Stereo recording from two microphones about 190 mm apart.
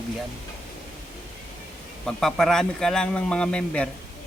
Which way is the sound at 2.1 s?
Centre (ahead or behind).